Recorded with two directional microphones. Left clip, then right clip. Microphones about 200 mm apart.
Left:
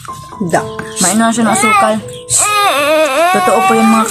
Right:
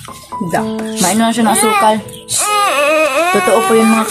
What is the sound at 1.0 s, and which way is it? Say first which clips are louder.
Music: left 1 dB; centre (ahead or behind).